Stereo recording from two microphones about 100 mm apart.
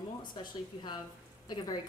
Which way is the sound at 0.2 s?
45° left (ahead or behind).